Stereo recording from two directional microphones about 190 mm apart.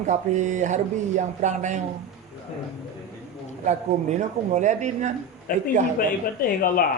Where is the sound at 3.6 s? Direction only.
40° right (ahead or behind).